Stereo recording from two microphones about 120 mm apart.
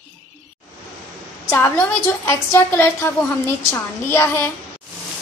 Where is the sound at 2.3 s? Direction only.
20° left (ahead or behind).